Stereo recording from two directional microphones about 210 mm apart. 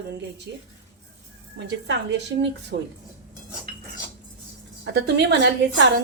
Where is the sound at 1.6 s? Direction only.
55° right (ahead or behind).